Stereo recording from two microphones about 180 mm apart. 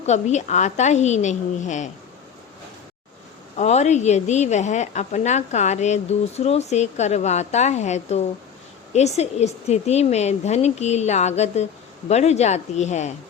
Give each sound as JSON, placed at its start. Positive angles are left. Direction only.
{"t": 0.0, "sound": "a woman's voice", "side_deg": 40}
{"t": 3.6, "sound": "a woman's voice", "side_deg": 40}